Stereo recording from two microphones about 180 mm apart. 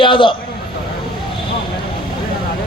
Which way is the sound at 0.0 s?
25° left (ahead or behind).